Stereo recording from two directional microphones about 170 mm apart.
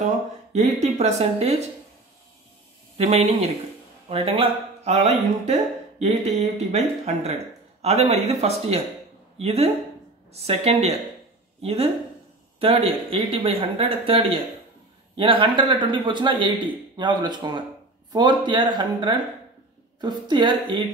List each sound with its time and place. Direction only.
0.0 s a sound: 45° right (ahead or behind)
0.7 s speech: 40° right (ahead or behind)
3.0 s speech: 40° right (ahead or behind)
7.8 s speech: 40° right (ahead or behind)
10.3 s speech: 40° right (ahead or behind)